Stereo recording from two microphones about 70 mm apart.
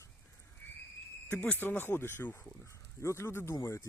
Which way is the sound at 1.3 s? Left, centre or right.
Left.